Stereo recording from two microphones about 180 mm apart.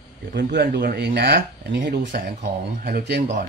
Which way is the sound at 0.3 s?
65° right (ahead or behind).